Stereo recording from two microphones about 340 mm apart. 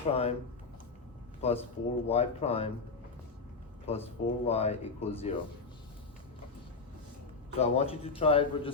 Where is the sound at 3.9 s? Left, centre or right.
Centre.